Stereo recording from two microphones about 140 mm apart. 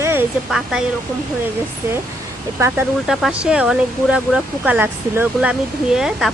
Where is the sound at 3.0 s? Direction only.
5° right (ahead or behind).